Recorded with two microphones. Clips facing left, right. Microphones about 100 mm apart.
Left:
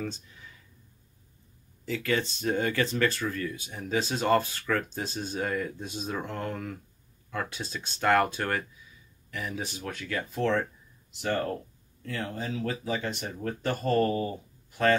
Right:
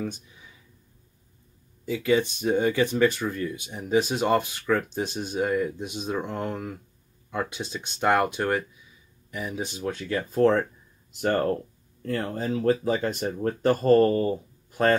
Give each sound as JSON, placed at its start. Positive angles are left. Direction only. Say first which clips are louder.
{"t": 0.0, "sound": "speech", "louder": "right 3 dB", "side_deg": -15}
{"t": 1.9, "sound": "speech", "louder": "right 6 dB", "side_deg": -15}
{"t": 10.3, "sound": "speech", "louder": "right 7 dB", "side_deg": -40}